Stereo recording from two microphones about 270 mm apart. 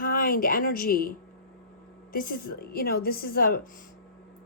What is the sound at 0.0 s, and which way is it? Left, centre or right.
A woman's voice, left.